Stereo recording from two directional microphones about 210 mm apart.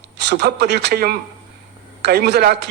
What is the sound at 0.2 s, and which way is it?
A man's voice, 55° right (ahead or behind).